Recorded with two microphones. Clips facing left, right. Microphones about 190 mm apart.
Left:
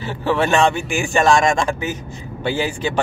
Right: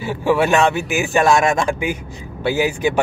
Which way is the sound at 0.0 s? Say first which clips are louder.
Right 3 dB; 10° right (ahead or behind).